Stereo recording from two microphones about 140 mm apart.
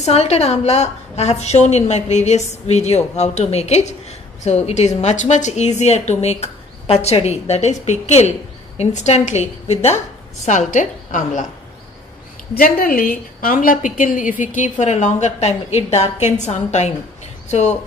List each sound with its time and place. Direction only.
0.0 s a woman's voice: 50° left (ahead or behind); by 11.4 s 65° left (ahead or behind)
12.5 s a woman's voice: 90° left; by 17.7 s 55° left (ahead or behind)